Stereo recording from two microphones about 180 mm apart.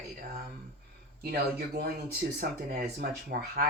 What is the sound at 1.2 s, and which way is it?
Speech, 60° right (ahead or behind).